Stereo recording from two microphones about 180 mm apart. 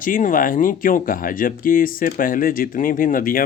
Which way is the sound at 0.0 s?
50° left (ahead or behind).